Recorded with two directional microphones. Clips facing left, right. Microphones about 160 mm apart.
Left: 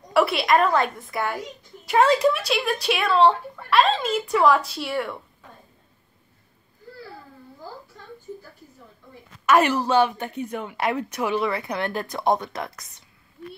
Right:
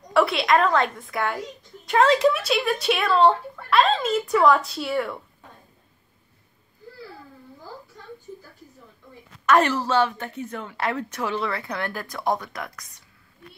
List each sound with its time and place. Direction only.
0.1 s a woman's voice: 5° left (ahead or behind)
9.5 s speech: 10° left (ahead or behind)